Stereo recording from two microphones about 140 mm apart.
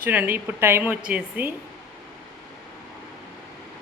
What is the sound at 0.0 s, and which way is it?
Speech, 10° right (ahead or behind).